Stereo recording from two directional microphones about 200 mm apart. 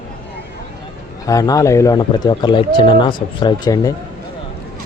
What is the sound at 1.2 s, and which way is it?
Speech, 15° left (ahead or behind).